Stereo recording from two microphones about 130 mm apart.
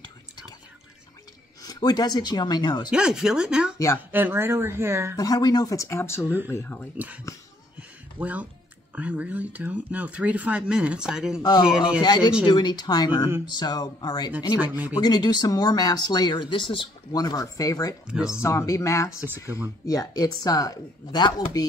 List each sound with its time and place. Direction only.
1.6 s speech: 30° left (ahead or behind)
2.9 s speech: 5° right (ahead or behind)
3.7 s speech: 25° left (ahead or behind)
4.1 s speech: 15° right (ahead or behind)
5.1 s speech: 30° left (ahead or behind)
8.2 s speech: 10° right (ahead or behind)
12.0 s speech: 35° left (ahead or behind)
18.0 s speech: 5° right (ahead or behind)
18.4 s speech: 20° left (ahead or behind)